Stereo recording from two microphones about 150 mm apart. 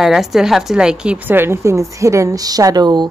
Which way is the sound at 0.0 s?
Centre (ahead or behind).